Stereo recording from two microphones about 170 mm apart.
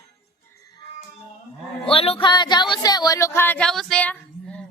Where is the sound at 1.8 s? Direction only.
35° left (ahead or behind).